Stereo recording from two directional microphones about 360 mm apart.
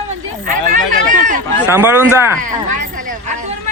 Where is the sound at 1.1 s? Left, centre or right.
Right.